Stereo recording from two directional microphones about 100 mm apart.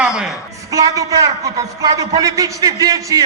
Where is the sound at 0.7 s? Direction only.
35° right (ahead or behind).